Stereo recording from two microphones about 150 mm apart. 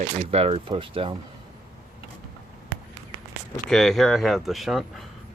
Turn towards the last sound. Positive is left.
turn(degrees=0)  # may be behind; listen again after turning